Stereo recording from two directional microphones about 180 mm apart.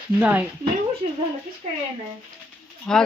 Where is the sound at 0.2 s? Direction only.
5° right (ahead or behind).